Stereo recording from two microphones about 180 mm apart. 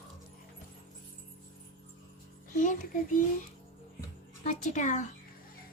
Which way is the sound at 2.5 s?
45° left (ahead or behind).